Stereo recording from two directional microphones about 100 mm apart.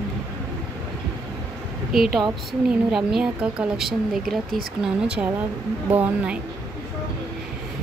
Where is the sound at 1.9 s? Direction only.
5° right (ahead or behind).